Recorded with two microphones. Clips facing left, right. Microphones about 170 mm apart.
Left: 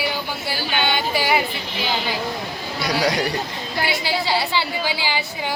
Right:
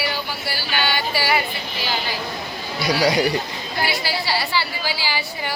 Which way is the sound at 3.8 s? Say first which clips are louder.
Left 1 dB; 20° left (ahead or behind).